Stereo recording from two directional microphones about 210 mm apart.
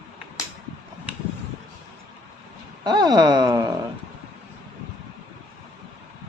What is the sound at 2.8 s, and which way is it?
Speech, 20° right (ahead or behind).